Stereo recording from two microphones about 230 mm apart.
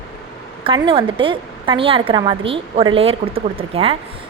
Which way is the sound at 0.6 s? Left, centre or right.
Right.